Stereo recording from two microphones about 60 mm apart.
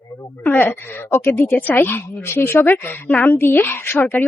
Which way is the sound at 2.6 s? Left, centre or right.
Left.